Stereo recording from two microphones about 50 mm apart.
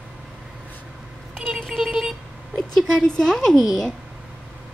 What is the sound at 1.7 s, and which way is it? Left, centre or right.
Vehicle, centre.